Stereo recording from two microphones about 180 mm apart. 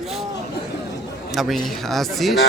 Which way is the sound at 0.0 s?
Centre (ahead or behind).